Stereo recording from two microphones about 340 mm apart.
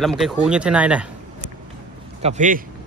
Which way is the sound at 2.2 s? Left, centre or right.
Centre.